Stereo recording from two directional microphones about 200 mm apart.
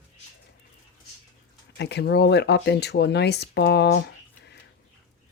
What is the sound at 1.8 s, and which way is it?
Speech, 55° left (ahead or behind).